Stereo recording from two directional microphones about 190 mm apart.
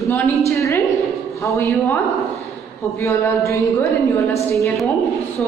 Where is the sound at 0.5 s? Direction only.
15° left (ahead or behind).